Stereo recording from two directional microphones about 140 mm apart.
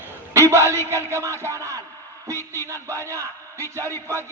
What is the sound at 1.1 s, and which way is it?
A man's voice, 20° right (ahead or behind).